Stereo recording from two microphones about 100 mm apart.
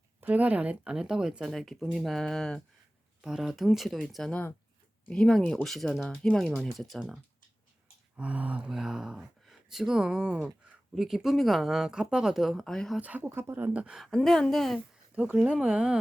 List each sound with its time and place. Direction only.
0.2 s speech: 15° right (ahead or behind); by 4.3 s centre (ahead or behind)
4.3 s speech: 15° left (ahead or behind)
8.1 s speech: 15° right (ahead or behind); by 13.0 s 5° left (ahead or behind)
13.0 s speech: 15° right (ahead or behind)
14.0 s speech: 5° left (ahead or behind)
15.1 s speech: 15° right (ahead or behind)